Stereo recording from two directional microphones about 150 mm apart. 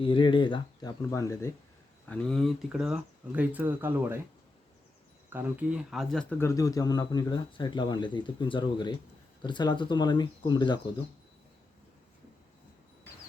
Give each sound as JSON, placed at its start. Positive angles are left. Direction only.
{"t": 0.0, "sound": "speech", "side_deg": 35}
{"t": 2.0, "sound": "speech", "side_deg": 10}
{"t": 5.3, "sound": "speech", "side_deg": -10}
{"t": 6.4, "sound": "speech", "side_deg": 20}